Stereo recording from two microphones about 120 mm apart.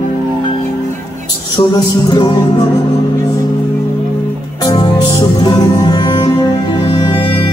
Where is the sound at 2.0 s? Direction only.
35° left (ahead or behind).